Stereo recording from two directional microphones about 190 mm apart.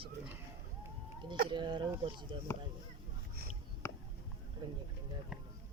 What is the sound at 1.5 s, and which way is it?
Speech, 25° right (ahead or behind).